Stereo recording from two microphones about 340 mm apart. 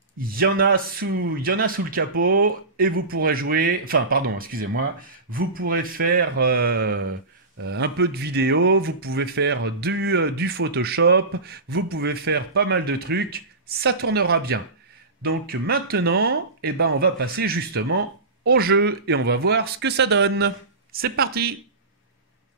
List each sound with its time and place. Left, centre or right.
0.4 s speech: right